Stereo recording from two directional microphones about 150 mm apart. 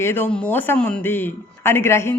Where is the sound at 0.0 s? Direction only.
15° left (ahead or behind).